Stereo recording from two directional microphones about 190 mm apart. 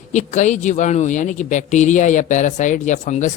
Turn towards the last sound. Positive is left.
turn(degrees=40)  # may be behind; listen again after turning